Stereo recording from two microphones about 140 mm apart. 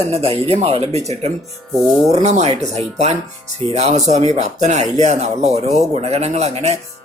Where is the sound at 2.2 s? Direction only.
50° right (ahead or behind).